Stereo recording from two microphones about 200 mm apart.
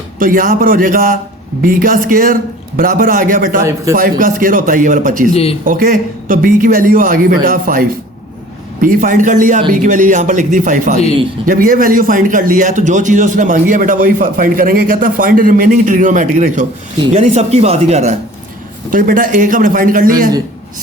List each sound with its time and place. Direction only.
0.2 s a man's voice: 45° right (ahead or behind)
3.6 s a man's voice: 15° right (ahead or behind)
3.9 s a man's voice: 45° right (ahead or behind)
5.3 s speech: 30° left (ahead or behind)
5.6 s a man's voice: 45° right (ahead or behind)